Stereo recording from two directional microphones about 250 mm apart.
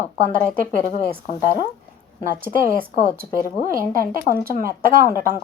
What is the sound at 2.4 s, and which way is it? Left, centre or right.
Speech, right.